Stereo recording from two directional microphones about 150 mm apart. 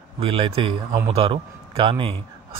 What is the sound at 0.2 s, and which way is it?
A man's voice, 35° right (ahead or behind).